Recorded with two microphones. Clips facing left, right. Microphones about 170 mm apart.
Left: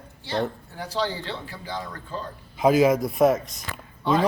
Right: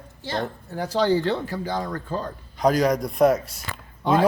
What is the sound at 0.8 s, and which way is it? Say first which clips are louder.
A man's voice: right 7 dB; 45° right (ahead or behind).